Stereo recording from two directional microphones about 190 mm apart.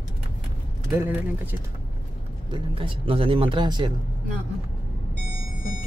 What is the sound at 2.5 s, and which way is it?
Speech, 25° right (ahead or behind).